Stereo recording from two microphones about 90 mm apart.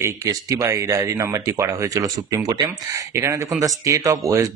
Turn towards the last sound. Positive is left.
turn(degrees=-35)  # may be behind; listen again after turning